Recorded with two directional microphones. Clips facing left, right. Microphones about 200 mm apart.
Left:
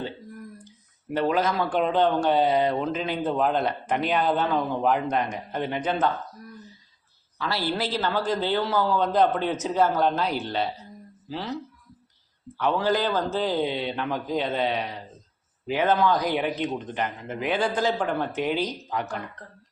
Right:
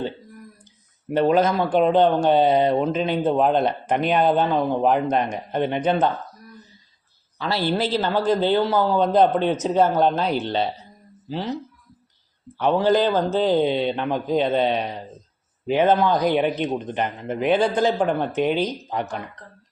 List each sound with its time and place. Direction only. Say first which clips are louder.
1.1 s speech: right 5 dB; 25° right (ahead or behind)
7.3 s speech: right 5 dB; 25° right (ahead or behind)
12.5 s speech: right 5 dB; 25° right (ahead or behind)